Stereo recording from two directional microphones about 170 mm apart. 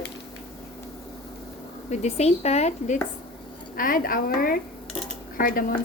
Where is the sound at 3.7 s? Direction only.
55° left (ahead or behind).